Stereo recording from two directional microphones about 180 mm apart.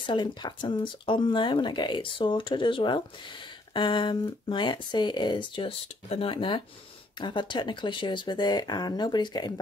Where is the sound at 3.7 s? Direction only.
25° left (ahead or behind).